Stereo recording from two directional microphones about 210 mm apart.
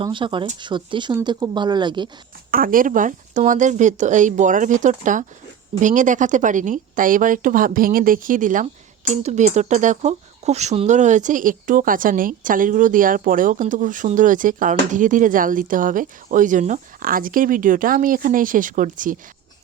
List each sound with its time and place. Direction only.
0.0 s speech: 25° right (ahead or behind)
2.5 s speech: 40° right (ahead or behind)